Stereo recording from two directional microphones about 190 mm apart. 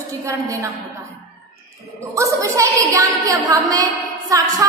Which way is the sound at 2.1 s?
15° right (ahead or behind).